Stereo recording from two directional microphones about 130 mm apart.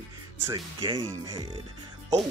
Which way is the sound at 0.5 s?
35° right (ahead or behind).